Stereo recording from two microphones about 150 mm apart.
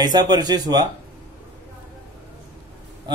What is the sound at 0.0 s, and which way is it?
Speech, 25° right (ahead or behind).